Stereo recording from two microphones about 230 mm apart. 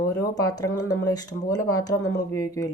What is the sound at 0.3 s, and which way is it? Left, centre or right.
A woman's voice, centre.